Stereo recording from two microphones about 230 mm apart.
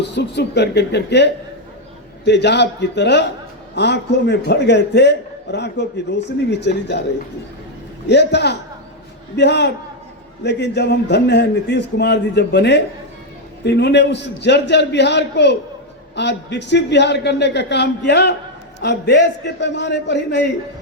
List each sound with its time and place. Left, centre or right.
0.0 s a man's voice: left
8.0 s a man's voice: left